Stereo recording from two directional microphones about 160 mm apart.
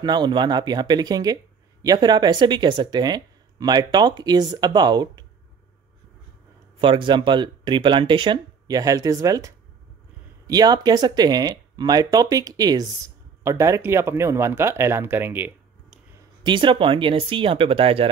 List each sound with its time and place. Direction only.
0.0 s speech: 25° right (ahead or behind)
6.8 s speech: 30° right (ahead or behind); by 16.3 s 10° right (ahead or behind)
16.4 s speech: 30° right (ahead or behind)